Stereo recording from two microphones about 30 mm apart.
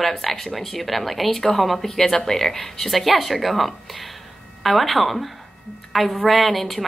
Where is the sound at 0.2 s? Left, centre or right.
Centre.